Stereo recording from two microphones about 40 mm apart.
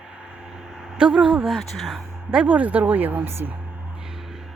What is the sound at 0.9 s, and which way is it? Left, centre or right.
Speech, right.